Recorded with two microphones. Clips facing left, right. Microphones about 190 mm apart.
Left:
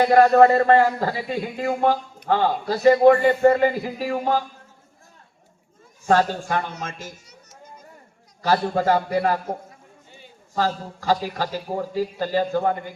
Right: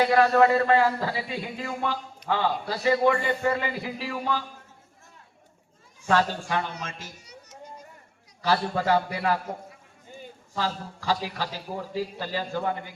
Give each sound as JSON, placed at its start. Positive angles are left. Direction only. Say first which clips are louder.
{"t": 0.0, "sound": "a man's voice", "louder": "left 5 dB", "side_deg": 45}
{"t": 6.1, "sound": "a man's voice", "louder": "left 4 dB", "side_deg": 45}
{"t": 8.4, "sound": "a man's voice", "louder": "left 4 dB", "side_deg": 45}